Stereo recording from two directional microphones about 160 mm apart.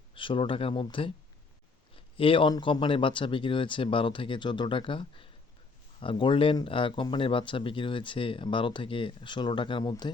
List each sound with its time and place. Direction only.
0.1 s speech: 35° left (ahead or behind)